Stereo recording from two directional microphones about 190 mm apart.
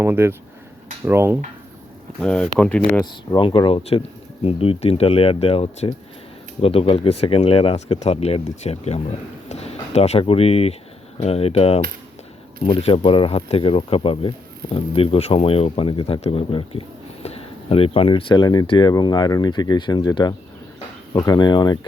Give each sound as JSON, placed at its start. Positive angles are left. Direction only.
{"t": 0.0, "sound": "speech", "side_deg": -10}
{"t": 2.2, "sound": "speech", "side_deg": 5}
{"t": 3.3, "sound": "speech", "side_deg": 25}